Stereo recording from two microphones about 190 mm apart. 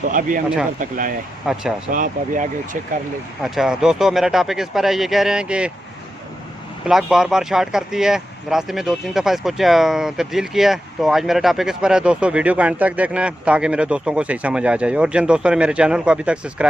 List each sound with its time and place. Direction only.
0.1 s speech: 45° right (ahead or behind)
1.5 s speech: centre (ahead or behind)
1.9 s speech: 45° right (ahead or behind)
3.4 s speech: centre (ahead or behind)
6.8 s speech: centre (ahead or behind)